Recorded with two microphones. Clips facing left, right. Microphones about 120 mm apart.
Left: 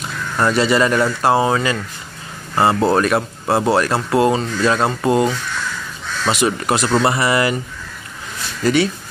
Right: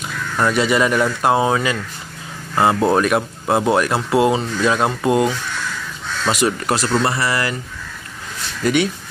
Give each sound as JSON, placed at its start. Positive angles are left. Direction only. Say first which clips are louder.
{"t": 0.4, "sound": "speech", "louder": "left 1 dB", "side_deg": -10}
{"t": 6.4, "sound": "speech", "louder": "left 1 dB", "side_deg": 0}
{"t": 6.9, "sound": "speech", "louder": "left 4 dB", "side_deg": 20}
{"t": 8.6, "sound": "speech", "louder": "left 1 dB", "side_deg": -5}